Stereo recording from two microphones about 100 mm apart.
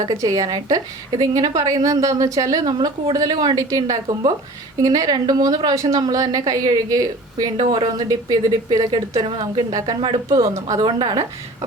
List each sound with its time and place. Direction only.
0.0 s a woman's voice: 40° right (ahead or behind)
9.2 s speech: 60° right (ahead or behind)
10.2 s a woman's voice: 35° right (ahead or behind)